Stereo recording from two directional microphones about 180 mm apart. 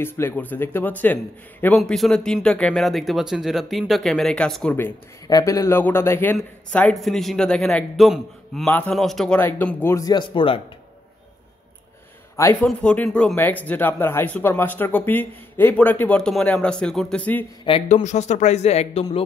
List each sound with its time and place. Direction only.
0.0 s speech: 10° left (ahead or behind); by 10.6 s 25° left (ahead or behind)
12.6 s speech: 5° left (ahead or behind)
17.6 s speech: 30° left (ahead or behind)